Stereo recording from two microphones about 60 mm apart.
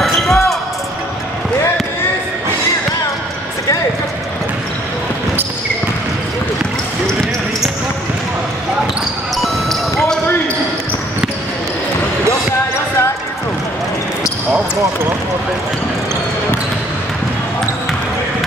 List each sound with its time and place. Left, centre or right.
0.0 s basketball bounce: centre
9.4 s basketball bounce: centre